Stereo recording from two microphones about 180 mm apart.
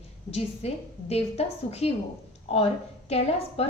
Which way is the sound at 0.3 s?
35° left (ahead or behind).